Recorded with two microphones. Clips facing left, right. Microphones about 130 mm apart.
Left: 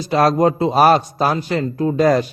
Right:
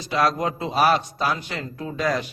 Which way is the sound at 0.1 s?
40° left (ahead or behind).